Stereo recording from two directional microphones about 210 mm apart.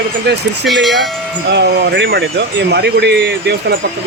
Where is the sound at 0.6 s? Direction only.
Centre (ahead or behind).